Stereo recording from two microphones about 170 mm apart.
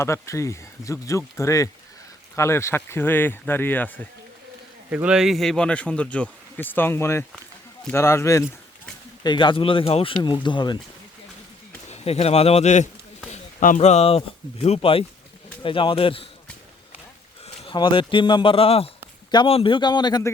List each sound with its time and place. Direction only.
0.0 s speech: 15° left (ahead or behind)
4.9 s a man's voice: 5° right (ahead or behind); by 8.4 s 15° left (ahead or behind)
9.2 s speech: 25° left (ahead or behind)
11.9 s a man's voice: 35° left (ahead or behind)
17.4 s a sound: 35° left (ahead or behind)
17.7 s speech: 30° left (ahead or behind)